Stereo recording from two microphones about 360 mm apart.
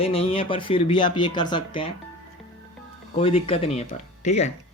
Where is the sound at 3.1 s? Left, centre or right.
Centre.